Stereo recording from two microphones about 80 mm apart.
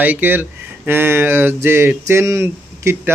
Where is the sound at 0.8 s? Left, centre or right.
Right.